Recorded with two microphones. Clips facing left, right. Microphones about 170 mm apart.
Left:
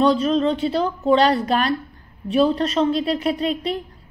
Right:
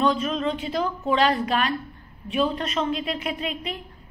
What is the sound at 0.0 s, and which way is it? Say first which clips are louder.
A woman's voice: left 6 dB; 35° left (ahead or behind).